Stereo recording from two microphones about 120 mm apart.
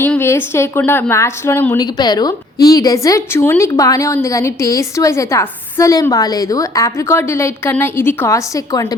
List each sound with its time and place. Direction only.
0.0 s a woman's voice: 20° left (ahead or behind)
1.8 s a woman's voice: 35° left (ahead or behind)